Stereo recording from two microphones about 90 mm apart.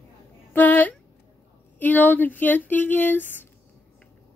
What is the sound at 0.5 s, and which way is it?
A woman's voice, 20° left (ahead or behind).